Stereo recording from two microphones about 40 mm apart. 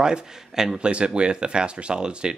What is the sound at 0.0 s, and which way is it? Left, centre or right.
Speech, centre.